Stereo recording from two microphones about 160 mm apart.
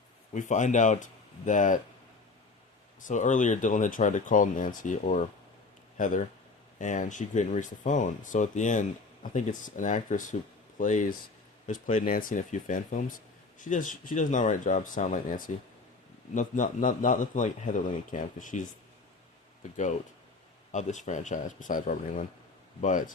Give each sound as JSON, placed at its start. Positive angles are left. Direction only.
{"t": 0.3, "sound": "speech", "side_deg": 50}
{"t": 3.0, "sound": "speech", "side_deg": 50}
{"t": 19.7, "sound": "speech", "side_deg": 50}